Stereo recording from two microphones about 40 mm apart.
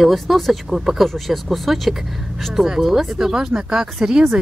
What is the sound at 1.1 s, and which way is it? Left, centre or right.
Speech, centre.